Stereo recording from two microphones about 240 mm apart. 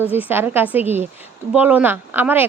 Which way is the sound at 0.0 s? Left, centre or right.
Centre.